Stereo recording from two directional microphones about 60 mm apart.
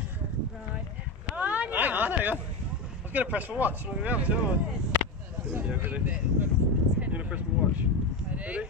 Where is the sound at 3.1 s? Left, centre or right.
Right.